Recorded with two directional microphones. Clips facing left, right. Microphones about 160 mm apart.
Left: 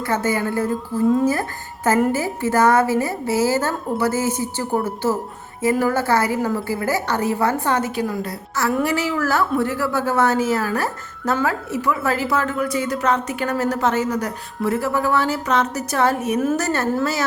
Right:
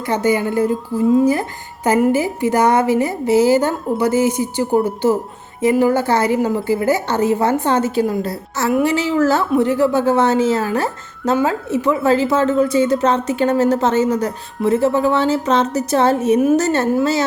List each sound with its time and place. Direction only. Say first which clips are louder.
0.0 s a woman's voice: right 4 dB; 15° right (ahead or behind)